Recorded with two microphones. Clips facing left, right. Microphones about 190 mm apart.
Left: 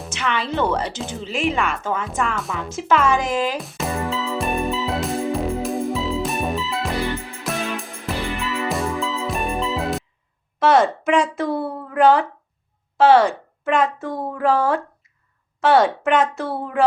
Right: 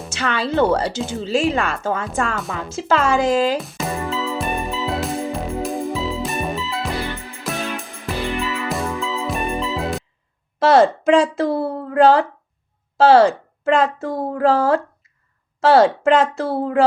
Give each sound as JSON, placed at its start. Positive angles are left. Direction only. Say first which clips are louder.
{"t": 0.2, "sound": "a woman's voice", "louder": "right 4 dB", "side_deg": -35}
{"t": 2.4, "sound": "speech", "louder": "even", "side_deg": 0}
{"t": 2.7, "sound": "a woman's voice", "louder": "right 1 dB", "side_deg": -30}
{"t": 3.6, "sound": "music", "louder": "even", "side_deg": 0}
{"t": 10.6, "sound": "a woman's voice", "louder": "right 3 dB", "side_deg": -30}